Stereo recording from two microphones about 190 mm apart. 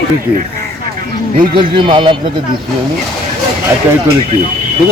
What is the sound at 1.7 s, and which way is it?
Speech, 25° right (ahead or behind).